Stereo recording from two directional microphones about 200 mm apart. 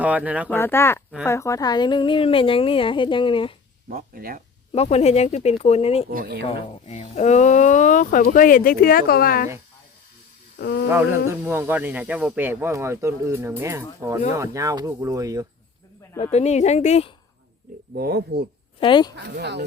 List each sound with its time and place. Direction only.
0.0 s speech: 5° right (ahead or behind)
0.5 s a woman's voice: 10° left (ahead or behind)
3.8 s speech: 45° right (ahead or behind)
4.7 s speech: 30° left (ahead or behind)
6.1 s speech: 50° right (ahead or behind)
6.5 s speech: 35° left (ahead or behind)
10.6 s speech: 55° left (ahead or behind)
10.8 s speech: 10° right (ahead or behind)
16.2 s speech: 35° left (ahead or behind)
17.9 s speech: 50° right (ahead or behind)
18.8 s a woman's voice: 25° left (ahead or behind)
19.1 s speech: 55° right (ahead or behind)